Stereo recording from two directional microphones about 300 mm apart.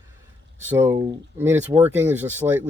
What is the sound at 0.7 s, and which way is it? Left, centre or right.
Speech, centre.